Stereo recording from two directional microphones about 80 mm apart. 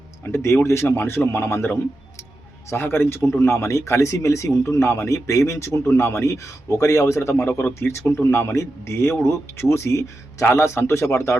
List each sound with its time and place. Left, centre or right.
0.3 s a man's voice: left
4.8 s speech: left